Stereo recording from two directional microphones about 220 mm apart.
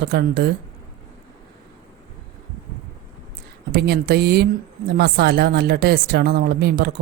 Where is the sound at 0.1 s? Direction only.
45° right (ahead or behind).